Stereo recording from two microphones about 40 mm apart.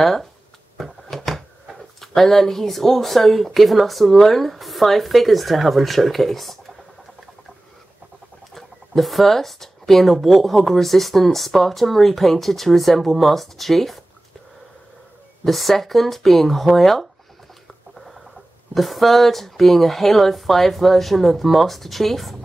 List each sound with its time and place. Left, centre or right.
0.0 s speech: centre
0.7 s a sound: centre
2.0 s speech: centre
8.5 s speech: centre
15.4 s speech: centre
18.8 s speech: centre